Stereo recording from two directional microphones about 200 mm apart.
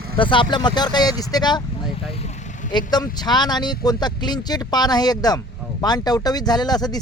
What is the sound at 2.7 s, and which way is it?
Speech, 20° left (ahead or behind).